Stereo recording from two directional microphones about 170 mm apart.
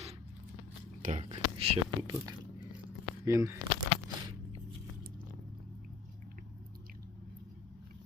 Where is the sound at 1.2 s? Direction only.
35° right (ahead or behind).